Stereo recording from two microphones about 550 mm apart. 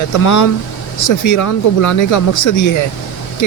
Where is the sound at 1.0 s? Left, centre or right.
Left.